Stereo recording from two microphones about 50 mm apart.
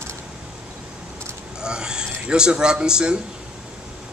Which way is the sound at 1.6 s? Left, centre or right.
Centre.